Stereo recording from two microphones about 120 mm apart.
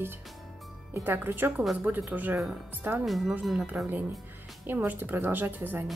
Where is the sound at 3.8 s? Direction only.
15° right (ahead or behind).